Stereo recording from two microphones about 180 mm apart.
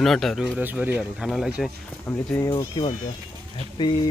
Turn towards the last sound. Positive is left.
turn(degrees=25)  # may be behind; listen again after turning